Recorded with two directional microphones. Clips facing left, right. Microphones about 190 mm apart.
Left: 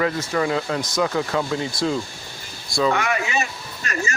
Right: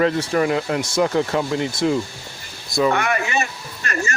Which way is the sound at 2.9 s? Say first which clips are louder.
Right 2 dB; 55° right (ahead or behind).